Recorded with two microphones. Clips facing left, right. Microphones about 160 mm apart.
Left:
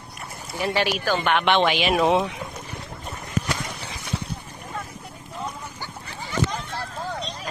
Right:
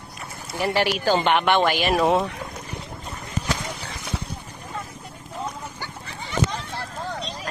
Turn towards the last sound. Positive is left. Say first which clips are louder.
# even
turn(degrees=0)  # may be behind; listen again after turning